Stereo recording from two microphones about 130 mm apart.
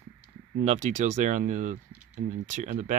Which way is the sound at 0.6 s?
60° right (ahead or behind).